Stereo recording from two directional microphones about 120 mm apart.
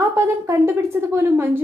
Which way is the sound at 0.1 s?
25° right (ahead or behind).